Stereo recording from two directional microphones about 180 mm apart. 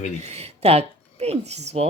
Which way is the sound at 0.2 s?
35° right (ahead or behind).